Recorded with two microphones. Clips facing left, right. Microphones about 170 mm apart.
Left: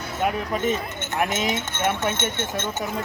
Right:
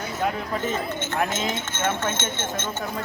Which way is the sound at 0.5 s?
20° left (ahead or behind).